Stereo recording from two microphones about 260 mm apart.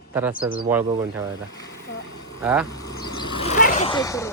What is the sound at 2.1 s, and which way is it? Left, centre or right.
Vehicle, left.